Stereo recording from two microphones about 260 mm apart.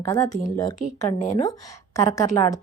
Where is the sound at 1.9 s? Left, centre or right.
Centre.